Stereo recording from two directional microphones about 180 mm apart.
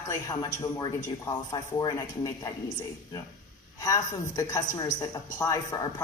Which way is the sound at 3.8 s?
20° left (ahead or behind).